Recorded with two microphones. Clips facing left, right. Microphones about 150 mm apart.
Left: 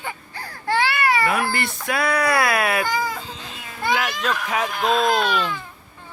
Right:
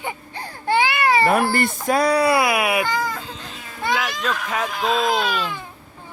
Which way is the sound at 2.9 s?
5° left (ahead or behind).